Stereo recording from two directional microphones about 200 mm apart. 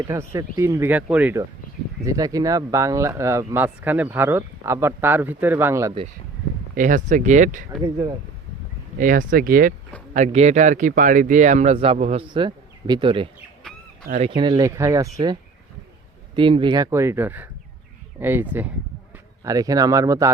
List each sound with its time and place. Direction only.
0.0 s speech: 15° right (ahead or behind)
6.7 s speech: 40° right (ahead or behind)
7.9 s speech: 15° right (ahead or behind)
9.0 s speech: 40° right (ahead or behind); by 15.1 s 15° right (ahead or behind)
16.3 s speech: 25° right (ahead or behind)